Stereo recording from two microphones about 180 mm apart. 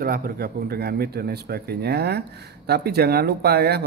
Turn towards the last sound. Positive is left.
turn(degrees=-65)  # may be behind; listen again after turning